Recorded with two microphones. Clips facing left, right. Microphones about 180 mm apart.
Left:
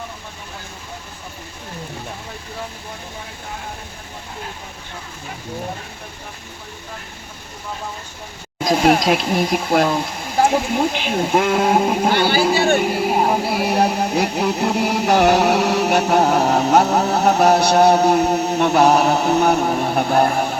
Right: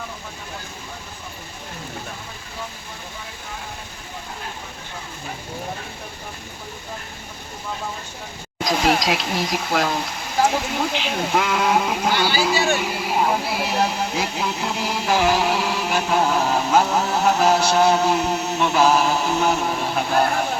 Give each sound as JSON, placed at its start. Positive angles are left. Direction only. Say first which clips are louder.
{"t": 8.8, "sound": "speech", "louder": "left 5 dB", "side_deg": 50}
{"t": 18.2, "sound": "a sound", "louder": "left 5 dB", "side_deg": 40}
{"t": 18.5, "sound": "speech", "louder": "left 3 dB", "side_deg": 60}
{"t": 19.5, "sound": "speech", "louder": "left 5 dB", "side_deg": 45}